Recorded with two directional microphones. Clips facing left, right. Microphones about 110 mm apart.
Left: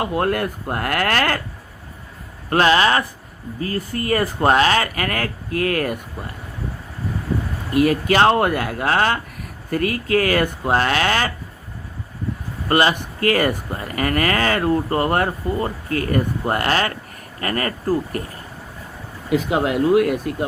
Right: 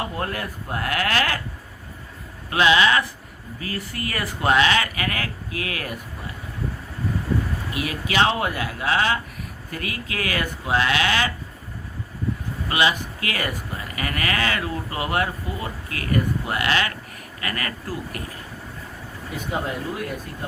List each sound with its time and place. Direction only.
0.0 s speech: 65° left (ahead or behind)
2.5 s speech: 45° left (ahead or behind)
7.7 s speech: 45° left (ahead or behind)
12.6 s speech: 45° left (ahead or behind)
19.3 s speech: 80° left